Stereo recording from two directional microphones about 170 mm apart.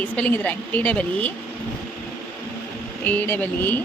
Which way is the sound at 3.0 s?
10° left (ahead or behind).